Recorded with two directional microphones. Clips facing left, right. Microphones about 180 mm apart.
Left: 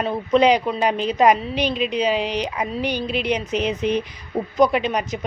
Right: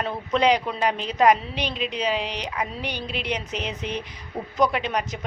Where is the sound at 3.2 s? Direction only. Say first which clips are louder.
Left 7 dB; 10° left (ahead or behind).